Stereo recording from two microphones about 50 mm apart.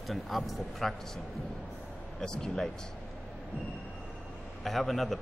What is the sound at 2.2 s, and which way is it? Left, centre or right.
Speech, centre.